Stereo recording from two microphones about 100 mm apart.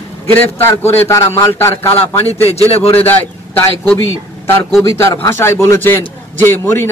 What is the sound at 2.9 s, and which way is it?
Speech, 20° left (ahead or behind).